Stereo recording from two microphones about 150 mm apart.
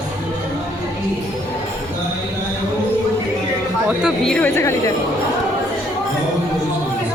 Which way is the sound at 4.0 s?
5° left (ahead or behind).